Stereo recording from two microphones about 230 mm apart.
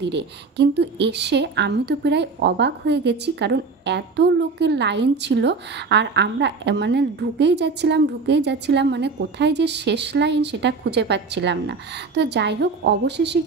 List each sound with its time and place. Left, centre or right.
0.0 s a woman's voice: right